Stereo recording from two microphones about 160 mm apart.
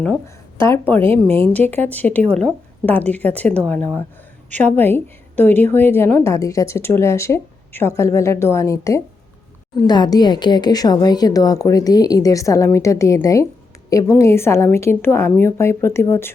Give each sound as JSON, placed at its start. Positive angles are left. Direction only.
{"t": 0.6, "sound": "a woman's voice", "side_deg": 15}